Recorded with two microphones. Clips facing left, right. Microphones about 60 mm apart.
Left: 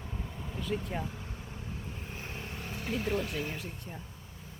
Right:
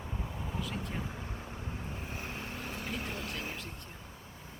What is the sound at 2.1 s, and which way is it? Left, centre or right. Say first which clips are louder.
Vehicle: even; centre.